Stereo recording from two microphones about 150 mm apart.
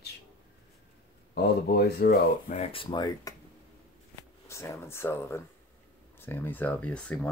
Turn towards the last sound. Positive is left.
turn(degrees=10)  # may be behind; listen again after turning